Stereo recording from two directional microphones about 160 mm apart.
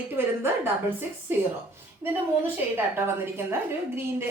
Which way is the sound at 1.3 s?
15° right (ahead or behind).